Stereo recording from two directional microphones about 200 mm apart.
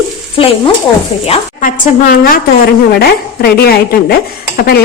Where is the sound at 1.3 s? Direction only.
40° left (ahead or behind).